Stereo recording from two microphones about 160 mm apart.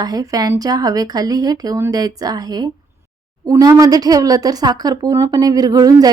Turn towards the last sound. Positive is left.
turn(degrees=-25)  # may be behind; listen again after turning